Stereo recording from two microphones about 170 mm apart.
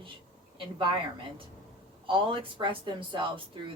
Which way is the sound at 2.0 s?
30° right (ahead or behind).